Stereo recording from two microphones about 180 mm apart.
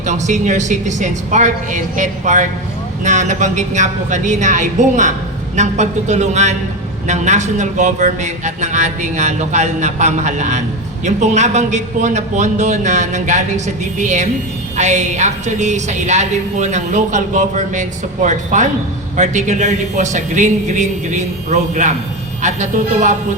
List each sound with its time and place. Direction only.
0.0 s a man's voice: 40° right (ahead or behind)